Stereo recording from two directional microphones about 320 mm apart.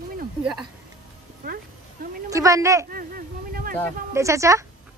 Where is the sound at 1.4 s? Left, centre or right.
Right.